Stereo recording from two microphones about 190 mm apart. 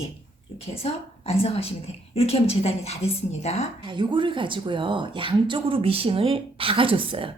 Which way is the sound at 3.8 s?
25° right (ahead or behind).